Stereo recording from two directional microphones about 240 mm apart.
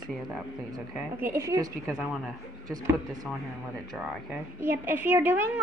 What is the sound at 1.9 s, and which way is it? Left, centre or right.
Speech, centre.